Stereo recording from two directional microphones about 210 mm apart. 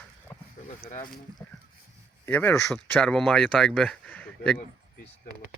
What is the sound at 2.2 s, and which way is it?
Speech, 10° left (ahead or behind).